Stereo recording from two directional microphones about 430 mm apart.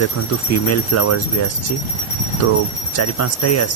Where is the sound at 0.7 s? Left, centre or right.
Left.